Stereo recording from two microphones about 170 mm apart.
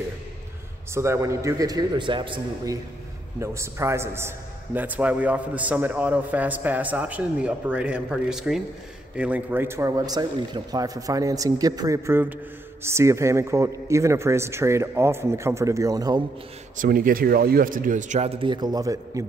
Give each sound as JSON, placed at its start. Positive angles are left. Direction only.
{"t": 0.9, "sound": "a man's voice", "side_deg": -15}
{"t": 16.7, "sound": "speech", "side_deg": -55}